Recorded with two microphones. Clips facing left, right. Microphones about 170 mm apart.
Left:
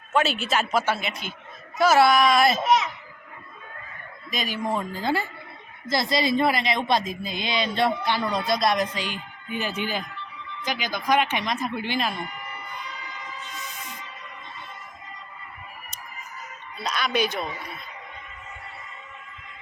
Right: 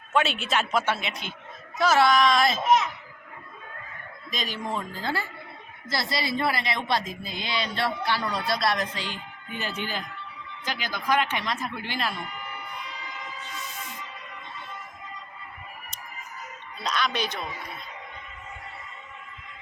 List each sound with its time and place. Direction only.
0.1 s speech: centre (ahead or behind)
4.3 s speech: 10° left (ahead or behind)
16.8 s speech: 5° left (ahead or behind)